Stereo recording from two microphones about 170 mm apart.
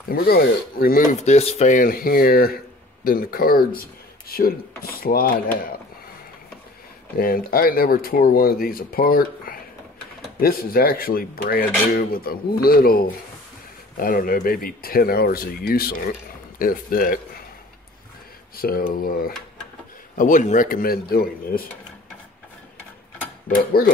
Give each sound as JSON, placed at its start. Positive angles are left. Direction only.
{"t": 0.1, "sound": "speech", "side_deg": 65}
{"t": 1.2, "sound": "speech", "side_deg": 40}
{"t": 7.2, "sound": "speech", "side_deg": 60}
{"t": 18.6, "sound": "speech", "side_deg": 60}